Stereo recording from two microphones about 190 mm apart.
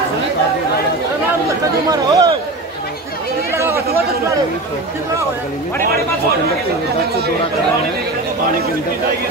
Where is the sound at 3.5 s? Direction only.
15° right (ahead or behind).